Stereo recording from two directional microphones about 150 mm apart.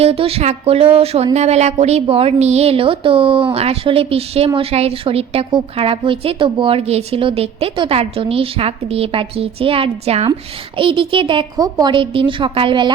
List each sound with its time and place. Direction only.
0.0 s speech: 40° right (ahead or behind)